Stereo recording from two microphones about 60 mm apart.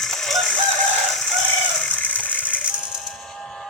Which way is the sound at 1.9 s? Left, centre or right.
Left.